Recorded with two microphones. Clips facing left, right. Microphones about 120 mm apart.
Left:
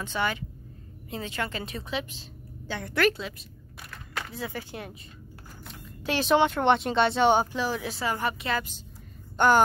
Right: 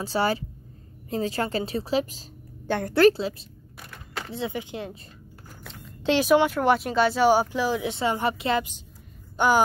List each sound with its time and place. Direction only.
0.0 s a woman's voice: 35° right (ahead or behind); by 4.9 s 20° right (ahead or behind)
6.1 s speech: 5° right (ahead or behind); by 8.6 s 30° right (ahead or behind)
9.4 s speech: 10° right (ahead or behind)